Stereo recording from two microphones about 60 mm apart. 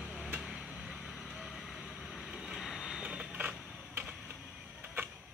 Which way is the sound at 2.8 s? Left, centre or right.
Centre.